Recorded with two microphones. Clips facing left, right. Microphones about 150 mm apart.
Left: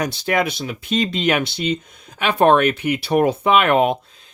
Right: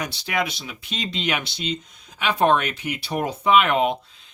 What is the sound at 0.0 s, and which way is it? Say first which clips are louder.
Speech: left 6 dB; 45° left (ahead or behind).